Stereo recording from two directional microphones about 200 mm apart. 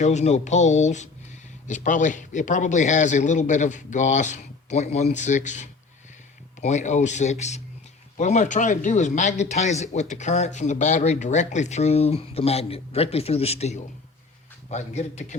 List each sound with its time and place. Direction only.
0.0 s speech: 35° left (ahead or behind)